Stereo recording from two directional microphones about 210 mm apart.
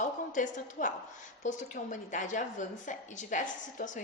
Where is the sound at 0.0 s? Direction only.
35° left (ahead or behind).